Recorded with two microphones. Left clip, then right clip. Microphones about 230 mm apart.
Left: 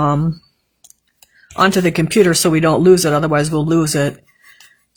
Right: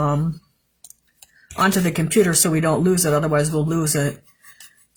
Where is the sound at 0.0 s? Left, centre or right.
Left.